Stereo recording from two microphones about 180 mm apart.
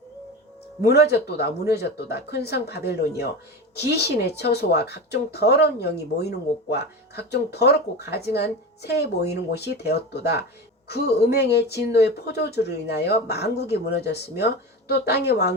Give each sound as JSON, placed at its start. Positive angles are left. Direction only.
{"t": 0.9, "sound": "speech", "side_deg": 65}